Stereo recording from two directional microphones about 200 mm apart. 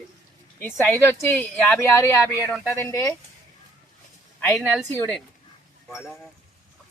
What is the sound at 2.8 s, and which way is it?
Speech, 15° left (ahead or behind).